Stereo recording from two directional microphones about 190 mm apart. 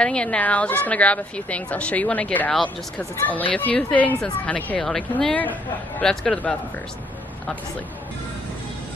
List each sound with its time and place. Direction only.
0.0 s speech: 5° left (ahead or behind)